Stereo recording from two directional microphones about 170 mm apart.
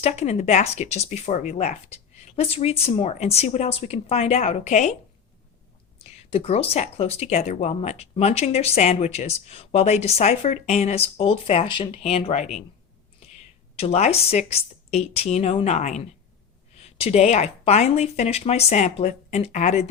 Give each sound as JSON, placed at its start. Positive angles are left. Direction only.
{"t": 0.0, "sound": "speech", "side_deg": 40}
{"t": 6.0, "sound": "speech", "side_deg": 35}
{"t": 13.7, "sound": "speech", "side_deg": 40}